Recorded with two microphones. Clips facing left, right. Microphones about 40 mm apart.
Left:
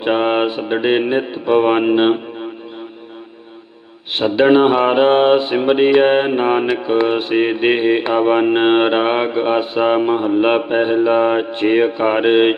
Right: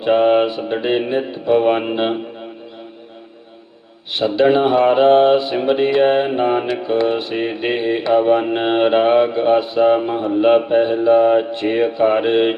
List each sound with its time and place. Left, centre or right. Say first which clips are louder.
0.0 s mantra: right 2 dB; left
4.1 s mantra: left 2 dB; left